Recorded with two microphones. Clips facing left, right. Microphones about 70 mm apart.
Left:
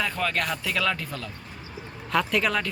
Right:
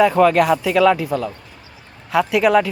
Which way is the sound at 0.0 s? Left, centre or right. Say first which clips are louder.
Right 14 dB; centre.